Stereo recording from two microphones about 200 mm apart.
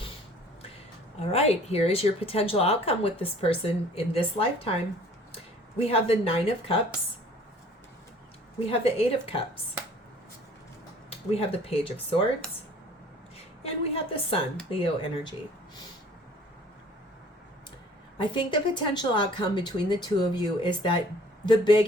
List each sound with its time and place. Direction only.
1.2 s speech: 30° left (ahead or behind)
5.9 s speech: 30° left (ahead or behind)
8.7 s speech: 30° left (ahead or behind)
11.3 s speech: 30° left (ahead or behind)
13.6 s speech: 30° left (ahead or behind)
18.2 s speech: 25° left (ahead or behind)